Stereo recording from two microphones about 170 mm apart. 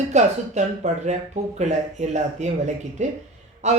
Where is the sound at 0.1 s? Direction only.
45° right (ahead or behind).